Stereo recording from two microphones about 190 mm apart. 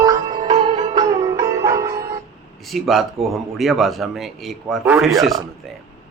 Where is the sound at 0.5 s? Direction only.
25° right (ahead or behind).